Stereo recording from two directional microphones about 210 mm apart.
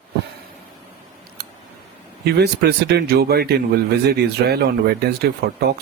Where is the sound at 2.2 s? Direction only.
50° right (ahead or behind).